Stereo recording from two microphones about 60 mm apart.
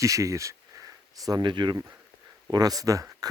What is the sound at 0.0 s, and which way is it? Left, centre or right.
Speech, right.